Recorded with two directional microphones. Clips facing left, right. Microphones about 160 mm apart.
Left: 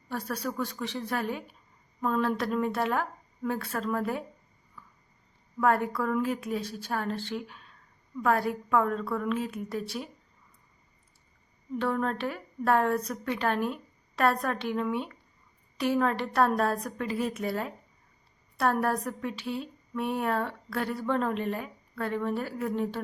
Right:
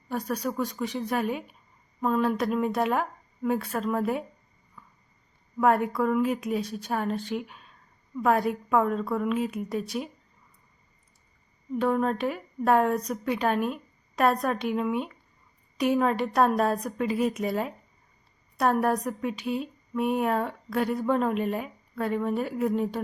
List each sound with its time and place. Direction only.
0.1 s speech: 15° right (ahead or behind)
5.5 s a woman's voice: 20° right (ahead or behind)
11.8 s speech: 15° right (ahead or behind)